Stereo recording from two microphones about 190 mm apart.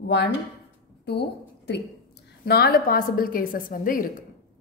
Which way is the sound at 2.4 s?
55° left (ahead or behind).